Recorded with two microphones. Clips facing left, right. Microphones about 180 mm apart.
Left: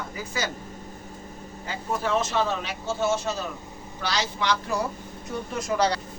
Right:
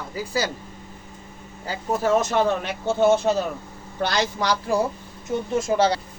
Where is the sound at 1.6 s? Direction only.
35° right (ahead or behind).